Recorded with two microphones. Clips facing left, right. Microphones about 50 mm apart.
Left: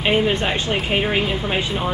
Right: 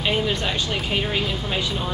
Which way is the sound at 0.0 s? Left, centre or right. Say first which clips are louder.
Left 4 dB; left.